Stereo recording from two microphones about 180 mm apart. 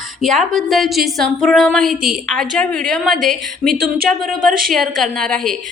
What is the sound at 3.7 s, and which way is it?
Speech, 55° right (ahead or behind).